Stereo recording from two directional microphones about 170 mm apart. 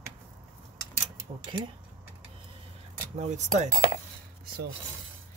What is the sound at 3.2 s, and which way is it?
Speech, 45° right (ahead or behind).